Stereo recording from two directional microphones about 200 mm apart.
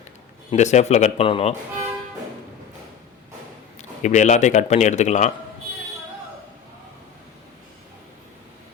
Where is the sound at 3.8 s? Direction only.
35° left (ahead or behind).